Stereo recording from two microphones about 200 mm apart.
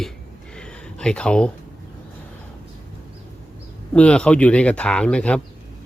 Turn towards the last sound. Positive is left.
turn(degrees=5)  # may be behind; listen again after turning